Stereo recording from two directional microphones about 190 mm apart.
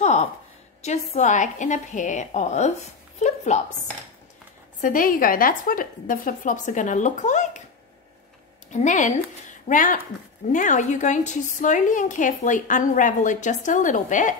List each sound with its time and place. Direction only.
1.1 s a woman's voice: 40° left (ahead or behind)
4.8 s a woman's voice: 45° left (ahead or behind)
8.7 s a woman's voice: 40° left (ahead or behind)